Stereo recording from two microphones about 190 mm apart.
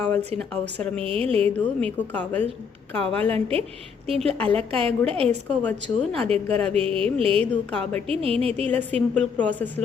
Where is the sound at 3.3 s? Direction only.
30° right (ahead or behind).